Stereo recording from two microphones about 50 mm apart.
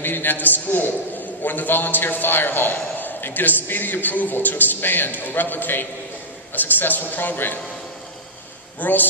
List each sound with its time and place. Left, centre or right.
0.0 s a man's voice: left
8.7 s a man's voice: left